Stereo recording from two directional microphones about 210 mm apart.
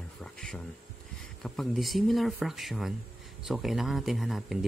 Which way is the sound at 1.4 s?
Centre (ahead or behind).